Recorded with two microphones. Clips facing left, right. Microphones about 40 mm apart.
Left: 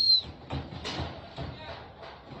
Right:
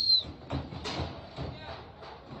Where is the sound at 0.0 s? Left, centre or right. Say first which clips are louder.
Left 2 dB; left.